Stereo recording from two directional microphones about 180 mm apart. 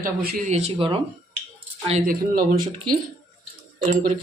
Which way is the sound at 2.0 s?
50° right (ahead or behind).